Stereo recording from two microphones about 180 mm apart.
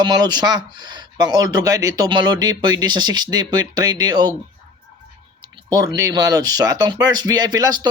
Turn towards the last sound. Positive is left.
turn(degrees=-20)  # may be behind; listen again after turning